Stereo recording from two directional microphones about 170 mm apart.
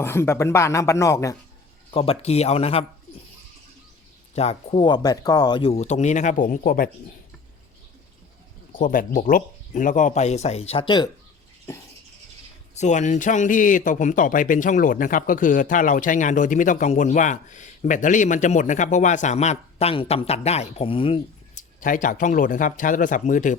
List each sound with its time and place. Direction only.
0.0 s speech: 15° left (ahead or behind)
1.9 s speech: 35° left (ahead or behind)
4.4 s speech: 35° left (ahead or behind)
5.7 s a man's voice: 40° left (ahead or behind); by 6.9 s 60° left (ahead or behind)
8.8 s a man's voice: 55° left (ahead or behind); by 11.1 s 25° left (ahead or behind)
12.7 s a man's voice: 45° left (ahead or behind)
21.5 s a man's voice: 50° left (ahead or behind)